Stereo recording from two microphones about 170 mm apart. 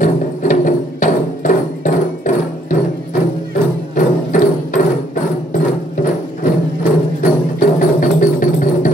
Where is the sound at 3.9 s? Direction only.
50° left (ahead or behind).